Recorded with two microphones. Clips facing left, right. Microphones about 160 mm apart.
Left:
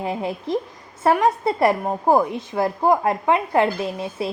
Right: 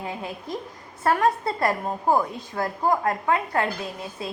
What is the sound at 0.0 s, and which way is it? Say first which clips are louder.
A woman's voice: left 7 dB; 20° left (ahead or behind).